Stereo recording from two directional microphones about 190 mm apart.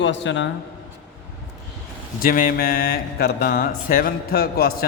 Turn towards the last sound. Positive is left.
turn(degrees=55)  # may be behind; listen again after turning